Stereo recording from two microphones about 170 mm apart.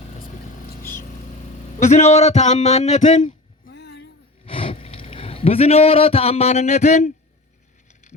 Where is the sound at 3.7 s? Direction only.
75° left (ahead or behind).